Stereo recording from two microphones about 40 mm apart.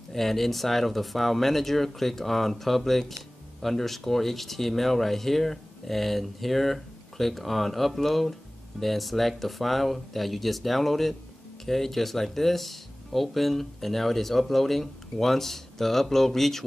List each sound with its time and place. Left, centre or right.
0.1 s speech: centre